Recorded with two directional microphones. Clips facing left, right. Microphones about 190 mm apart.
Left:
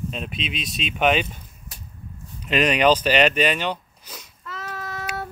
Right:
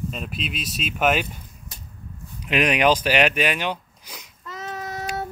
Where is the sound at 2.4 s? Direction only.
10° right (ahead or behind).